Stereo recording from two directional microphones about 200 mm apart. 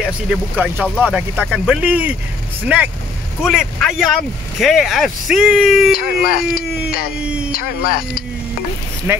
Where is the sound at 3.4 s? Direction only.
5° right (ahead or behind).